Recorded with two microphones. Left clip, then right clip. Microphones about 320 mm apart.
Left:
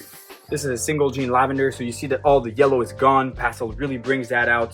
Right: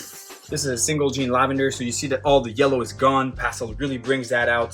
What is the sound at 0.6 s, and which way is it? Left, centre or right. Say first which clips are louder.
Speech: left 1 dB; left.